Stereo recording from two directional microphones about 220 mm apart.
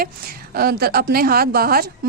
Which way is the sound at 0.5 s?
45° right (ahead or behind).